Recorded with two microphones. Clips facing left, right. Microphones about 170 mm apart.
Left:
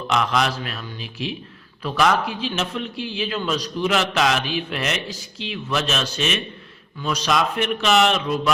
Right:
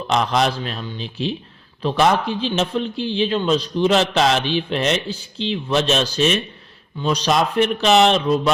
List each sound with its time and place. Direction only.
0.1 s a man's voice: 35° right (ahead or behind)